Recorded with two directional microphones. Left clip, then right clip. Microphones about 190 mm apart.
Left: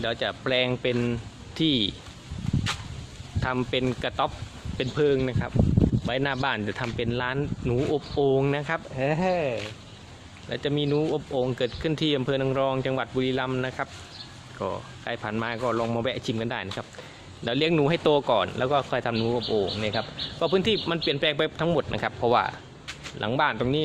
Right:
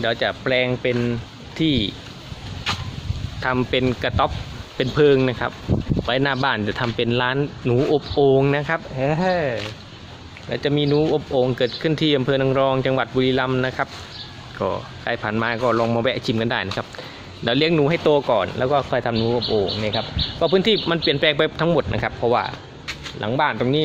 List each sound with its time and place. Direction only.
0.0 s speech: 5° left (ahead or behind)
3.4 s speech: 5° left (ahead or behind)
9.0 s speech: 15° left (ahead or behind)
10.5 s speech: centre (ahead or behind)
17.7 s speech: 20° left (ahead or behind)